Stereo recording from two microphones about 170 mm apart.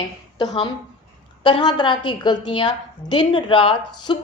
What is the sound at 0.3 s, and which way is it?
A woman's voice, 25° left (ahead or behind).